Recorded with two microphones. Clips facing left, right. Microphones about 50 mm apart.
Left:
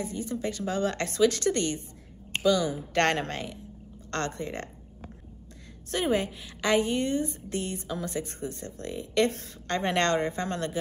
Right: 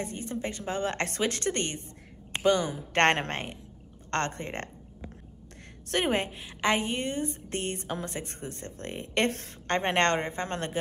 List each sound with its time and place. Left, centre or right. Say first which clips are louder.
0.0 s a woman's voice: left 2 dB; right
5.9 s a woman's voice: left 1 dB; right